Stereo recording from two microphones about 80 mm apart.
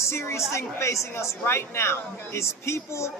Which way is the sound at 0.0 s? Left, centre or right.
Left.